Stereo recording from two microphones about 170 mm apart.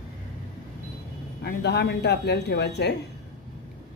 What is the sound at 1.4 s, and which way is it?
A woman's voice, 75° left (ahead or behind).